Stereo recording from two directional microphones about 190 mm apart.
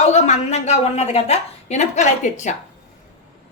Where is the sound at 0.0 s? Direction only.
35° left (ahead or behind).